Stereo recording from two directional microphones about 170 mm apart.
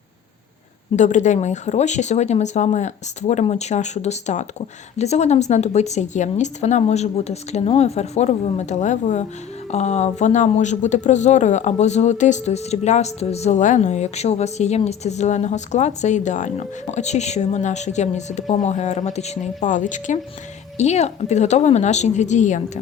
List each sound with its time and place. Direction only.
0.9 s speech: 45° left (ahead or behind)